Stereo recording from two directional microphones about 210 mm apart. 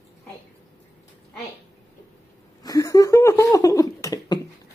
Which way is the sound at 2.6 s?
15° left (ahead or behind).